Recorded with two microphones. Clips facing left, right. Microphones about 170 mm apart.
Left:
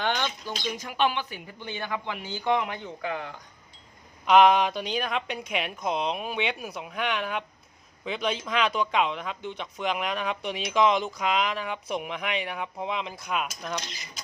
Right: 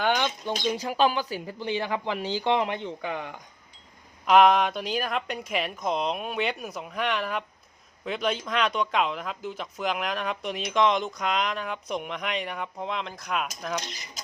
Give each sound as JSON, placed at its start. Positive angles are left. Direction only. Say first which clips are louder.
{"t": 0.0, "sound": "bird", "louder": "right 3 dB", "side_deg": -10}
{"t": 0.6, "sound": "speech", "louder": "right 3 dB", "side_deg": -35}
{"t": 4.3, "sound": "speech", "louder": "even", "side_deg": 0}